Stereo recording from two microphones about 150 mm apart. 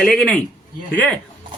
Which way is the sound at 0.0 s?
5° left (ahead or behind).